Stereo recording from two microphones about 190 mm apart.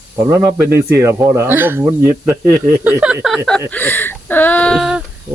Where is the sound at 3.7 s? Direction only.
10° left (ahead or behind).